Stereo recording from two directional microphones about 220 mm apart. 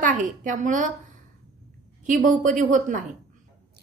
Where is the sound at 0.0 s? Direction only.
35° right (ahead or behind).